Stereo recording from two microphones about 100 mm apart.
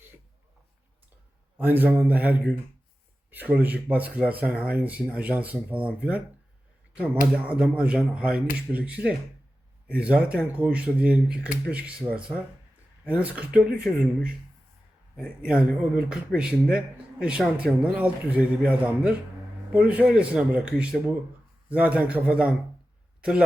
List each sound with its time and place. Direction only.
1.5 s speech: 20° right (ahead or behind)